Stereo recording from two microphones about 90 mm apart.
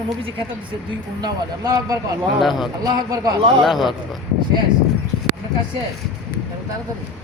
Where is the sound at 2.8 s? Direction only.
45° right (ahead or behind).